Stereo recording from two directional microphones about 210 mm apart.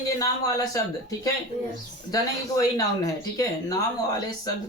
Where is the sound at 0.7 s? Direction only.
15° left (ahead or behind).